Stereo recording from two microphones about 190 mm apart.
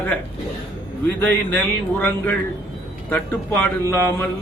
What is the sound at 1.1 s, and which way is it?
A man's voice, 10° left (ahead or behind).